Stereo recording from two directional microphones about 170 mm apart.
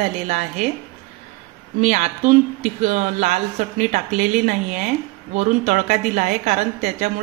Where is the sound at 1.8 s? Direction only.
45° right (ahead or behind).